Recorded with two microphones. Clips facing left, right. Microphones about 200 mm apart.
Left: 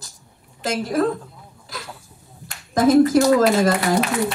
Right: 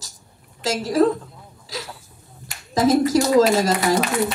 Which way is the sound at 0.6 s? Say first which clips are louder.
Right 2 dB; 55° left (ahead or behind).